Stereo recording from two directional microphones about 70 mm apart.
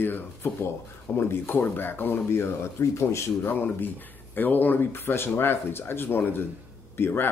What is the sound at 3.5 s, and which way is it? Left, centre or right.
Speech, left.